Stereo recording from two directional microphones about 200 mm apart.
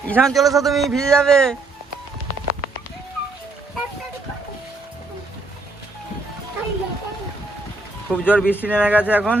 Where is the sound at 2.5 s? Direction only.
40° right (ahead or behind).